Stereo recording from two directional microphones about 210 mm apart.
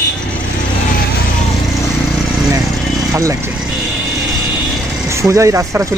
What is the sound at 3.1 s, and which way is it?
Speech, 15° right (ahead or behind).